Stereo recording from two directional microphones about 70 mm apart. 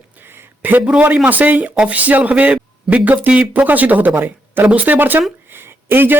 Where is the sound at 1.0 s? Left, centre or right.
Right.